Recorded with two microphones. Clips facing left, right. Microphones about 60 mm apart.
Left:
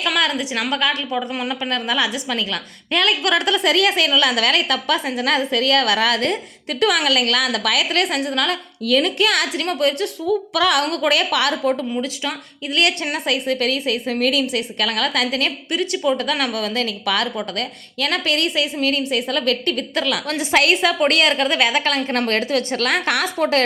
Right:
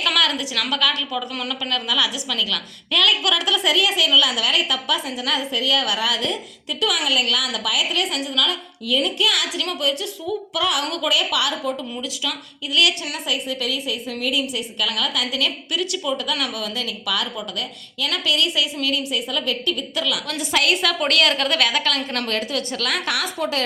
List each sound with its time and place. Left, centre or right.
0.2 s a woman's voice: left
10.8 s a woman's voice: left
11.9 s a woman's voice: left
14.8 s a woman's voice: left
20.8 s a woman's voice: left
22.3 s a woman's voice: left